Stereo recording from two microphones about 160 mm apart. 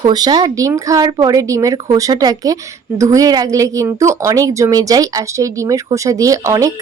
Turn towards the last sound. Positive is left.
turn(degrees=-20)  # may be behind; listen again after turning